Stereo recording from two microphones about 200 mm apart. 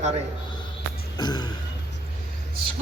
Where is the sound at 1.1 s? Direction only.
20° left (ahead or behind).